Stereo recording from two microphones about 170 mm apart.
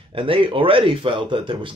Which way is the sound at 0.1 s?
30° right (ahead or behind).